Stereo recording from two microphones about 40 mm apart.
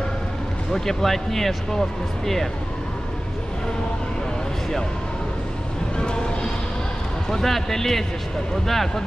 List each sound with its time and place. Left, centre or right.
0.7 s speech: centre
5.9 s speech: left